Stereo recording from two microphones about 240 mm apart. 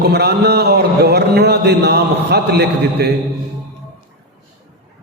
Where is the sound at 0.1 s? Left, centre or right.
Right.